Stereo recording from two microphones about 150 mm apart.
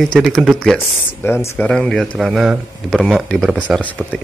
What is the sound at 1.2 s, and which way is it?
Speech, 15° left (ahead or behind).